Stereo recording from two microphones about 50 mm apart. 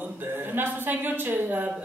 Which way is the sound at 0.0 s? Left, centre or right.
Right.